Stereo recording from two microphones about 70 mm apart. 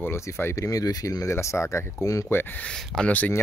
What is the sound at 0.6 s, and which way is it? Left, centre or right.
Speech, left.